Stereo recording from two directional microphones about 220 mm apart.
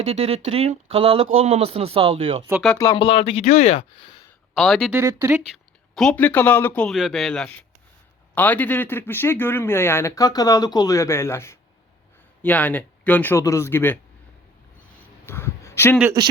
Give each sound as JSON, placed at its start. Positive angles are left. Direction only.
{"t": 0.0, "sound": "speech", "side_deg": -30}
{"t": 2.5, "sound": "speech", "side_deg": -5}
{"t": 2.7, "sound": "speech", "side_deg": 15}
{"t": 4.5, "sound": "speech", "side_deg": 0}
{"t": 4.9, "sound": "speech", "side_deg": -15}
{"t": 15.3, "sound": "a sound", "side_deg": 10}